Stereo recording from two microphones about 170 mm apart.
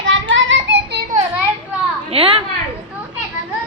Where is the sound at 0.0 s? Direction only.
90° right.